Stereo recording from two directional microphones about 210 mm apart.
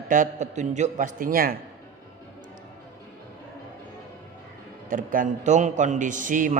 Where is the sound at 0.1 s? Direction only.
35° right (ahead or behind).